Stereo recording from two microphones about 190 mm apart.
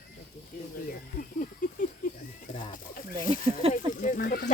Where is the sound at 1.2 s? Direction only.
45° left (ahead or behind).